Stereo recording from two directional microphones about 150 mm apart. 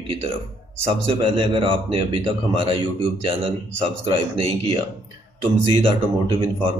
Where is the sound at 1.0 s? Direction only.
35° right (ahead or behind).